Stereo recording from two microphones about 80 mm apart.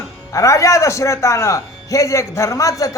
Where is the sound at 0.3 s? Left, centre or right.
Left.